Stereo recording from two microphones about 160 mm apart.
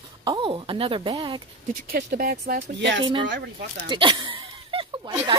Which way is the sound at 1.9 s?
65° right (ahead or behind).